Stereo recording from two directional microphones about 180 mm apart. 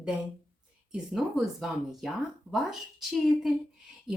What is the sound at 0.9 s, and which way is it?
Speech, centre (ahead or behind).